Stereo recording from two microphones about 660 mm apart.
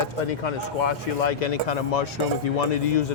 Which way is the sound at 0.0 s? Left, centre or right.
Left.